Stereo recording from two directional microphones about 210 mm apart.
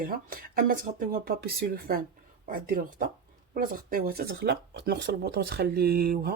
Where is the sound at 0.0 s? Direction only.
45° right (ahead or behind).